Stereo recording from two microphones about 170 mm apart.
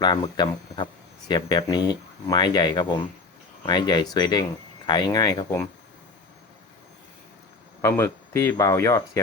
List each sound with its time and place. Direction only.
0.0 s speech: 25° left (ahead or behind)
7.8 s speech: 15° left (ahead or behind)